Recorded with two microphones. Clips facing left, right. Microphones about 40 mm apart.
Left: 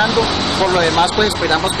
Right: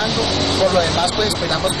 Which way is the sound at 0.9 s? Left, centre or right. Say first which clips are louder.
Left 4 dB; left.